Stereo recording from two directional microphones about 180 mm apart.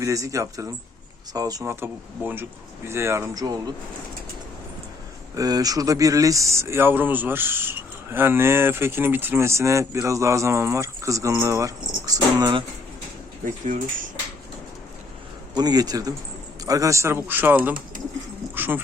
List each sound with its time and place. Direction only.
0.0 s speech: 20° right (ahead or behind)
5.3 s speech: 20° right (ahead or behind)
13.4 s speech: 45° right (ahead or behind)
15.5 s a man's voice: 20° right (ahead or behind)